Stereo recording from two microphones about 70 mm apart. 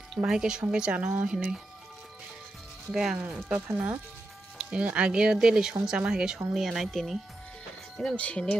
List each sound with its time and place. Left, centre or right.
0.2 s speech: centre
2.9 s speech: centre
3.4 s speech: centre
8.2 s speech: centre